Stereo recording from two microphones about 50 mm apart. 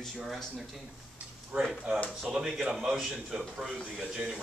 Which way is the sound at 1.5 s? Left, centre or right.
Centre.